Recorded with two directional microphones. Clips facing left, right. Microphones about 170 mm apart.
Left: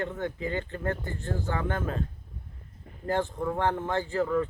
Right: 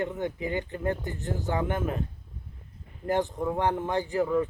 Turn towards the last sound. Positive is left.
turn(degrees=-15)  # may be behind; listen again after turning